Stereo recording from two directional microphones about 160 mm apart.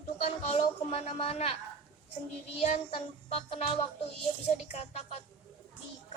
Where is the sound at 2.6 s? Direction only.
40° left (ahead or behind).